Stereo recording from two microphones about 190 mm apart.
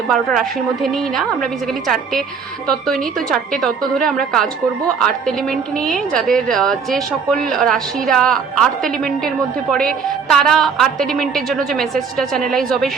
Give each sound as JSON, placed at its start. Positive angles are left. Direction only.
{"t": 0.1, "sound": "a woman's voice", "side_deg": 0}
{"t": 2.6, "sound": "a woman's voice", "side_deg": 0}